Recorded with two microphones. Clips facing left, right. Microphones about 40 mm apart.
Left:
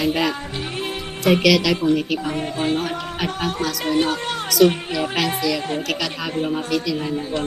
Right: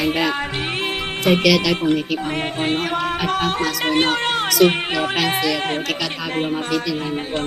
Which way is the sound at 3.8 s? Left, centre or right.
Right.